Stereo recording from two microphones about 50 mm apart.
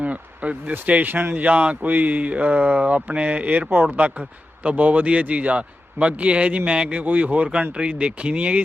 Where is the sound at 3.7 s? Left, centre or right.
Right.